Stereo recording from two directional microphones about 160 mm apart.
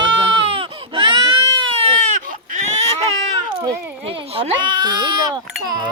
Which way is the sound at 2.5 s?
45° right (ahead or behind).